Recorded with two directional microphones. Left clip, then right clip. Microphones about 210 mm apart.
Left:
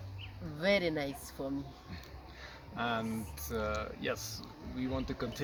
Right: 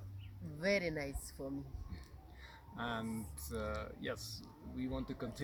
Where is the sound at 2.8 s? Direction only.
10° left (ahead or behind).